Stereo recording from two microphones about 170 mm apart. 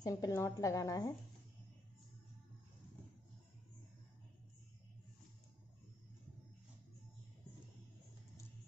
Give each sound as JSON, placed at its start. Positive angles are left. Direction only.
{"t": 0.0, "sound": "a woman's voice", "side_deg": 20}